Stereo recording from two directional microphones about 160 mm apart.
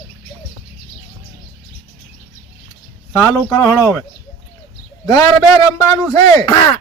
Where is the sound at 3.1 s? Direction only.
20° left (ahead or behind).